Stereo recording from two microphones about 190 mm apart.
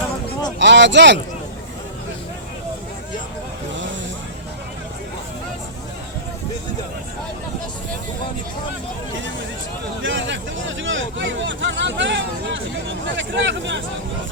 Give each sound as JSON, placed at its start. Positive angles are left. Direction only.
{"t": 0.6, "sound": "speech", "side_deg": -70}
{"t": 10.0, "sound": "vehicle", "side_deg": -80}